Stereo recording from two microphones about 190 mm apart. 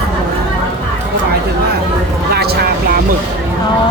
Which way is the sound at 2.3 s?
55° right (ahead or behind).